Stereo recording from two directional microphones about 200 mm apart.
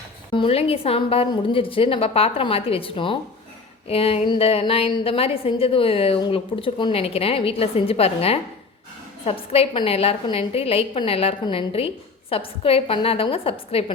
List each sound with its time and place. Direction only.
0.3 s a woman's voice: 30° left (ahead or behind)